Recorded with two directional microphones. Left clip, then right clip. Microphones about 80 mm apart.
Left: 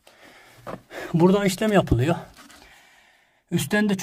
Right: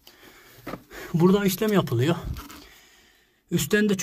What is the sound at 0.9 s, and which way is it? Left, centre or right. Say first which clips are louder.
Speech: left 3 dB; left.